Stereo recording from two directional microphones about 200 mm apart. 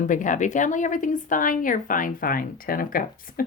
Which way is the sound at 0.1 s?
40° left (ahead or behind).